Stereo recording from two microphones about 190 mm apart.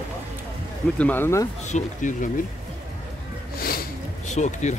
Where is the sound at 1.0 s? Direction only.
10° left (ahead or behind).